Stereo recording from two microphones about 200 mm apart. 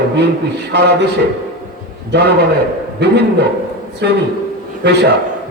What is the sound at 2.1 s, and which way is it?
A man's voice, 55° right (ahead or behind).